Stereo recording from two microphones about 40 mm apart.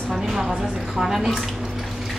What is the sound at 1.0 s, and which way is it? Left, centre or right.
Speech, centre.